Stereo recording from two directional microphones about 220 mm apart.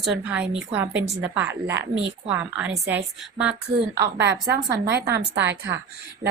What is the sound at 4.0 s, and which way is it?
A woman's voice, 50° right (ahead or behind).